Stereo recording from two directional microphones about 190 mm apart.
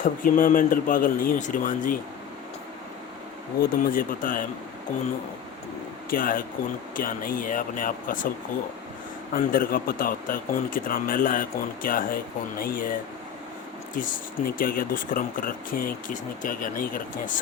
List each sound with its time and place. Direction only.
0.0 s speech: 45° left (ahead or behind)
3.6 s speech: 50° left (ahead or behind)
6.1 s speech: 45° left (ahead or behind)
9.3 s speech: 50° left (ahead or behind)